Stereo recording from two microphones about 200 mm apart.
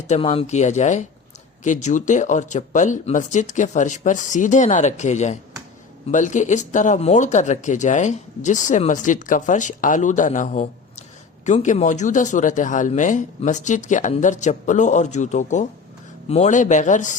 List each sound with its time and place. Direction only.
0.1 s speech: 30° left (ahead or behind)